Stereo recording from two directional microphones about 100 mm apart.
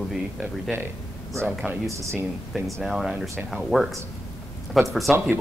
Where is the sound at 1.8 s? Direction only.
30° right (ahead or behind).